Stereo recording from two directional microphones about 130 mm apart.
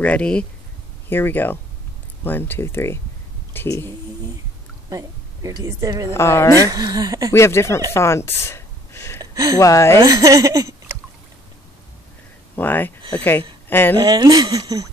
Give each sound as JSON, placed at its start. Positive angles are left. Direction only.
{"t": 0.0, "sound": "a woman's voice", "side_deg": 10}
{"t": 4.8, "sound": "a woman's voice", "side_deg": -25}
{"t": 6.1, "sound": "a woman's voice", "side_deg": 20}
{"t": 6.6, "sound": "a woman's voice", "side_deg": -30}
{"t": 7.3, "sound": "a woman's voice", "side_deg": 20}
{"t": 7.9, "sound": "a sound", "side_deg": 20}
{"t": 9.2, "sound": "a sound", "side_deg": -25}
{"t": 9.6, "sound": "a woman's voice", "side_deg": 25}
{"t": 10.0, "sound": "a woman's voice", "side_deg": -25}
{"t": 12.5, "sound": "a woman's voice", "side_deg": 15}
{"t": 13.9, "sound": "speech", "side_deg": -30}